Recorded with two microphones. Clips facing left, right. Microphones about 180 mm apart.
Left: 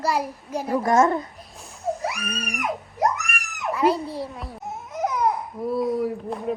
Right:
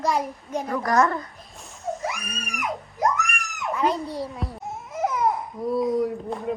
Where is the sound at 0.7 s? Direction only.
25° left (ahead or behind).